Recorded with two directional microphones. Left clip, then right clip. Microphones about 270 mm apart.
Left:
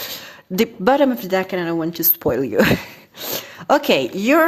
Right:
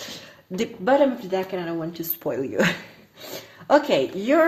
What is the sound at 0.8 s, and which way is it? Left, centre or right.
A woman's voice, left.